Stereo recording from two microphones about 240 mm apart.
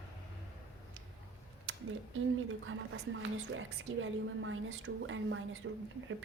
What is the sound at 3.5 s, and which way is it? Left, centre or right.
A woman's voice, right.